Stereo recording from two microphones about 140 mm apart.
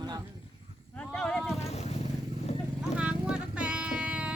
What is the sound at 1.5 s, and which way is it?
Vehicle, 50° left (ahead or behind).